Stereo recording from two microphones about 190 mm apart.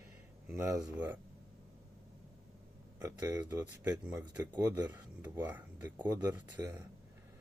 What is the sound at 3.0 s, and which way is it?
Speech, 20° right (ahead or behind).